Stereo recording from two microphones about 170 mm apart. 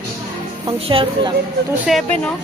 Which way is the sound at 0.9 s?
35° right (ahead or behind).